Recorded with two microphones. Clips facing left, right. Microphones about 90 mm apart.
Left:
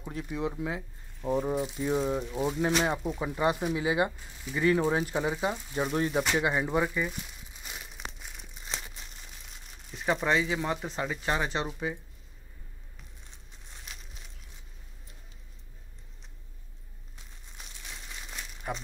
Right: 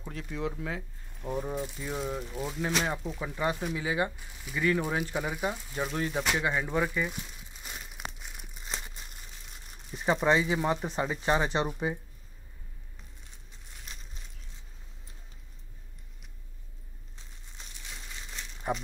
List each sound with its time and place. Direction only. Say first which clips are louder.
0.0 s speech: left 2 dB; 15° left (ahead or behind)
3.0 s speech: left 3 dB; 5° left (ahead or behind)
7.6 s crumpling: right 1 dB; centre (ahead or behind)
9.8 s speech: right 2 dB; 10° right (ahead or behind)
18.7 s speech: right 4 dB; 25° right (ahead or behind)